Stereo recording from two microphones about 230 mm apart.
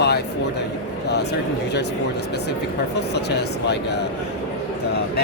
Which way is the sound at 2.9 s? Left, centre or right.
Left.